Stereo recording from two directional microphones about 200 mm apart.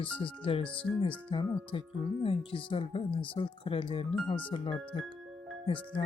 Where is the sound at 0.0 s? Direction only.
25° left (ahead or behind).